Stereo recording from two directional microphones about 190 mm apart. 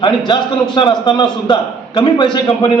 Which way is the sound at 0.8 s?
25° left (ahead or behind).